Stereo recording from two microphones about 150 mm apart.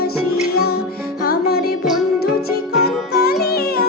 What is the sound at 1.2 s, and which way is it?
Music, 90° left.